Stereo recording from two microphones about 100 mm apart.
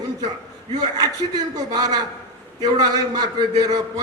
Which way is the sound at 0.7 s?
40° right (ahead or behind).